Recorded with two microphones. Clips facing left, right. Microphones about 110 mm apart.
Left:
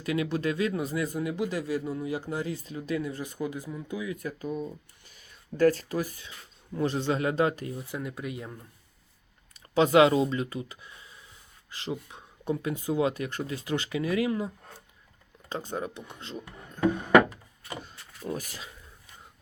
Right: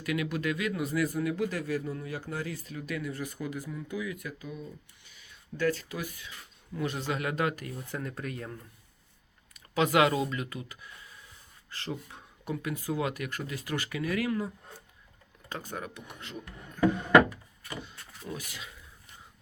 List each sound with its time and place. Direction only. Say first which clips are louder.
0.0 s a man's voice: left 3 dB; 30° left (ahead or behind)
7.8 s speech: left 2 dB; 10° left (ahead or behind)
9.7 s a man's voice: left 5 dB; 25° left (ahead or behind)
17.8 s speech: left 5 dB; 40° left (ahead or behind)